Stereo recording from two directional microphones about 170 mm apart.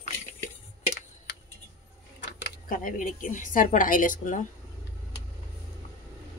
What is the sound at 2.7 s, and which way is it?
A woman's voice, 50° left (ahead or behind).